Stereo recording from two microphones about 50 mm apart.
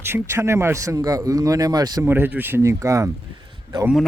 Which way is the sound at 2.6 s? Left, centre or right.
Right.